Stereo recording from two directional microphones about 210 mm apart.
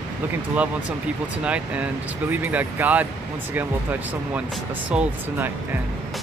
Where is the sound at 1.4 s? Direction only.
5° right (ahead or behind).